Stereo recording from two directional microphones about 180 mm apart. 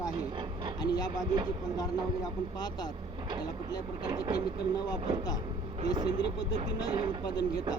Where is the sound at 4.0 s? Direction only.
25° right (ahead or behind).